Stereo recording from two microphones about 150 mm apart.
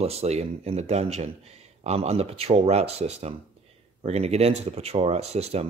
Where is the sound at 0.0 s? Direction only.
45° right (ahead or behind).